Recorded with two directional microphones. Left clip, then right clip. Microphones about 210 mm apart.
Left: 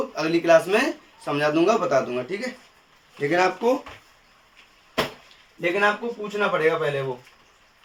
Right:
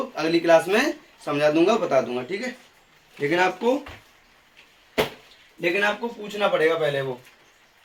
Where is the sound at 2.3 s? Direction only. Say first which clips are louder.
Even; 10° left (ahead or behind).